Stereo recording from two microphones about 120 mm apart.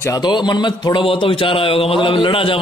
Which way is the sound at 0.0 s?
35° left (ahead or behind).